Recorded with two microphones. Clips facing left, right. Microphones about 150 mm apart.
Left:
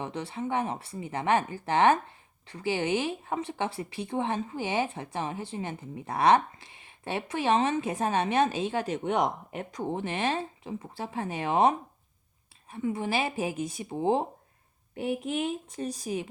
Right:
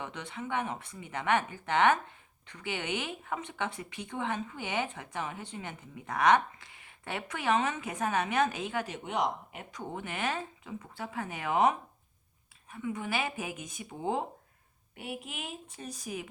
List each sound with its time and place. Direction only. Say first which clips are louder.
0.0 s speech: left 6 dB; 30° left (ahead or behind)
9.9 s speech: left 5 dB; 30° left (ahead or behind)
15.1 s speech: left 11 dB; 45° left (ahead or behind)